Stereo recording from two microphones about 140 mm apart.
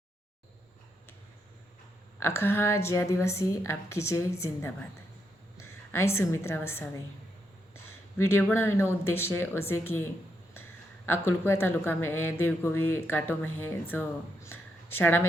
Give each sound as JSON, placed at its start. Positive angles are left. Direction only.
{"t": 2.1, "sound": "a woman's voice", "side_deg": 20}
{"t": 8.3, "sound": "speech", "side_deg": 15}
{"t": 14.4, "sound": "a sound", "side_deg": 15}